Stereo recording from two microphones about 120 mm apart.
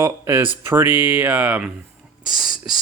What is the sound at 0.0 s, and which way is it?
Speech, 20° right (ahead or behind).